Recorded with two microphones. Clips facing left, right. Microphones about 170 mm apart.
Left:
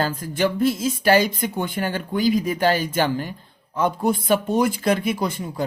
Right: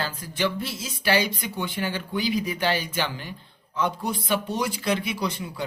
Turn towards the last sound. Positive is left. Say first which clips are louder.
# left 4 dB
turn(degrees=45)  # may be behind; listen again after turning